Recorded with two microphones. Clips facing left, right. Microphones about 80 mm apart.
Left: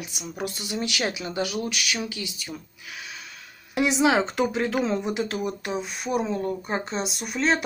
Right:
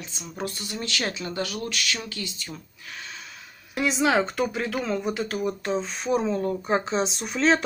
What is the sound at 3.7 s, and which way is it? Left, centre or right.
Speech, centre.